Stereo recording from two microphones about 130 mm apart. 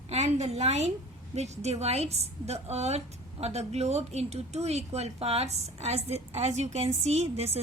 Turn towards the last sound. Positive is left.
turn(degrees=-55)  # may be behind; listen again after turning